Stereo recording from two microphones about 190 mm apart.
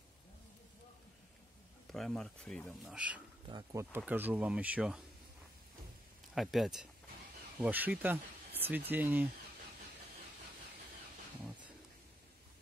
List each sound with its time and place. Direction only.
1.9 s speech: centre (ahead or behind)
3.4 s speech: 20° right (ahead or behind)
6.3 s speech: centre (ahead or behind)